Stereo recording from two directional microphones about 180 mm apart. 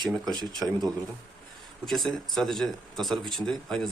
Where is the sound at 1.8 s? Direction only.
Centre (ahead or behind).